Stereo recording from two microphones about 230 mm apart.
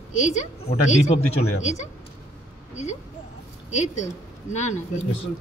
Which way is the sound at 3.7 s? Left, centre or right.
Left.